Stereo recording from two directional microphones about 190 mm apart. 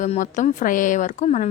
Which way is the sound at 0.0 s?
40° left (ahead or behind).